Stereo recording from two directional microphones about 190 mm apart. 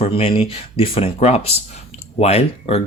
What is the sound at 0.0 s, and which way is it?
Speech, 30° left (ahead or behind).